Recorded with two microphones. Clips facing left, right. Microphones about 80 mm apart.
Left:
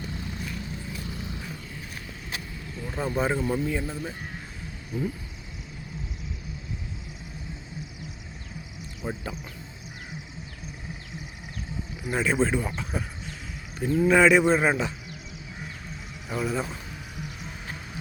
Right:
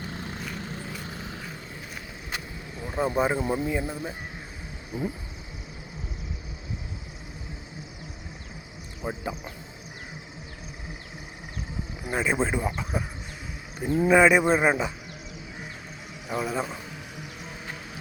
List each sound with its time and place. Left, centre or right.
0.1 s vehicle: right
2.7 s speech: right
9.0 s speech: centre
12.1 s speech: centre
16.3 s speech: centre
17.2 s music: centre